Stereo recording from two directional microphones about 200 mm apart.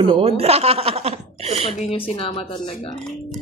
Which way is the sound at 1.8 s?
30° left (ahead or behind).